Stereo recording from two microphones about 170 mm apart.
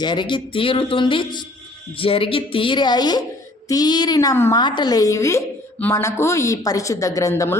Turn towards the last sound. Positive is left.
turn(degrees=15)  # may be behind; listen again after turning